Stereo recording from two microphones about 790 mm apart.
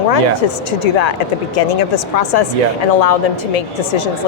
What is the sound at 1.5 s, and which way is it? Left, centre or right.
Speech, left.